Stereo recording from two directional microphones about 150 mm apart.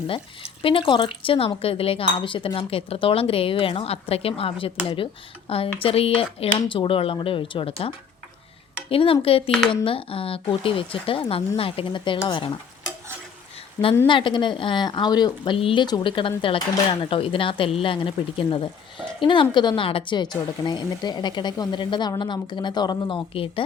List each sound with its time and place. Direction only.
0.1 s speech: 35° left (ahead or behind)
14.1 s speech: 35° left (ahead or behind)